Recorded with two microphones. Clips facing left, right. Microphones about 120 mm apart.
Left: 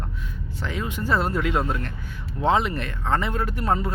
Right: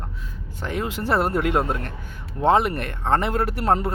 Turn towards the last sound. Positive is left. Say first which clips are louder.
# right 3 dB
turn(degrees=-70)  # may be behind; listen again after turning